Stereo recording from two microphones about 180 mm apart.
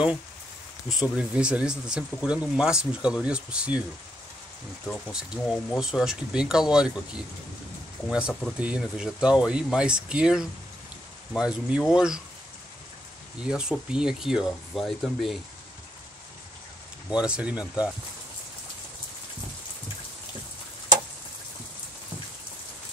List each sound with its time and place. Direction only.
1.1 s speech: 5° right (ahead or behind)
4.8 s speech: 5° left (ahead or behind)
13.4 s speech: 5° right (ahead or behind)
17.1 s speech: 5° right (ahead or behind)